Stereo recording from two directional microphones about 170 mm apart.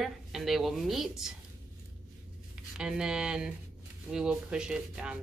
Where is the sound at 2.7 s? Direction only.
5° right (ahead or behind).